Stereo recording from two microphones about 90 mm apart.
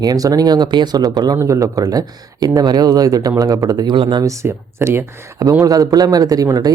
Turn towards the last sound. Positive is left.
turn(degrees=-45)  # may be behind; listen again after turning